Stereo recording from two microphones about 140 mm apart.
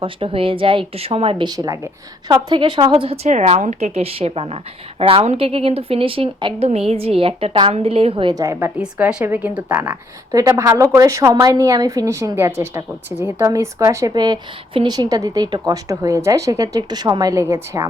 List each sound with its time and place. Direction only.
0.0 s speech: 40° right (ahead or behind)
3.2 s a woman's voice: 55° right (ahead or behind); by 8.7 s 20° right (ahead or behind)
8.8 s a woman's voice: 5° right (ahead or behind)